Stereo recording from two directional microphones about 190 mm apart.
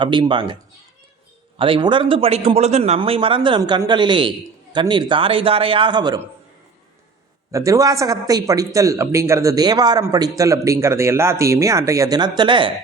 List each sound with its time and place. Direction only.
0.0 s a man's voice: 25° right (ahead or behind)
7.5 s speech: 15° right (ahead or behind)